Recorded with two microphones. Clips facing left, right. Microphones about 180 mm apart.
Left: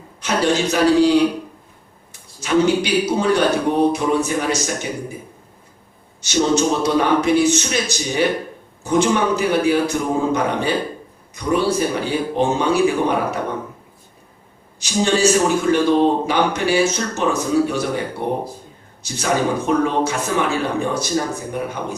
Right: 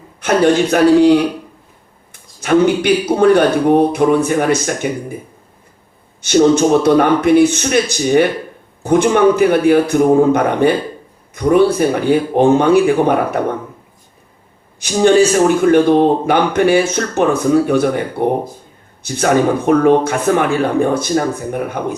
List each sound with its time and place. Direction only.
0.2 s a man's voice: 55° right (ahead or behind)
2.4 s a man's voice: 55° right (ahead or behind)
6.2 s a man's voice: 55° right (ahead or behind)
14.8 s a man's voice: 55° right (ahead or behind)